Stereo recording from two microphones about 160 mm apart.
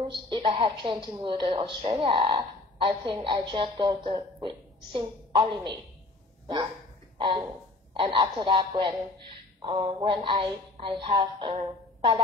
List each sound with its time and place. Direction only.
0.0 s a woman's voice: 30° right (ahead or behind)